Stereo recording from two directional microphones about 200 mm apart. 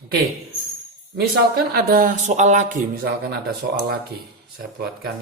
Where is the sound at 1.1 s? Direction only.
50° right (ahead or behind).